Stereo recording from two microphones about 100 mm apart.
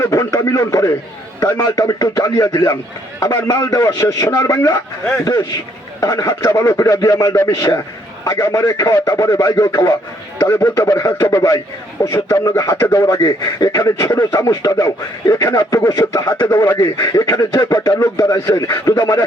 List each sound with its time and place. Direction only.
0.0 s a man's voice: 30° left (ahead or behind)
10.4 s a man's voice: 25° left (ahead or behind)
17.3 s speech: 40° left (ahead or behind)